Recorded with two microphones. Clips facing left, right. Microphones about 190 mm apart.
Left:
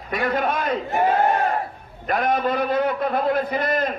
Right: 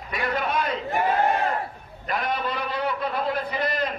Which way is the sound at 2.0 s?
50° left (ahead or behind).